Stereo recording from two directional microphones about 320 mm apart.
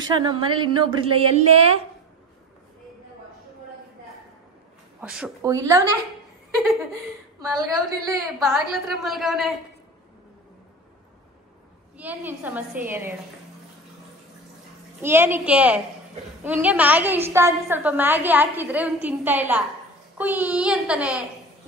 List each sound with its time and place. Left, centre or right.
0.2 s speech: centre
5.0 s speech: centre
7.3 s speech: centre
8.4 s a woman's voice: centre
12.0 s a woman's voice: centre
15.0 s a woman's voice: centre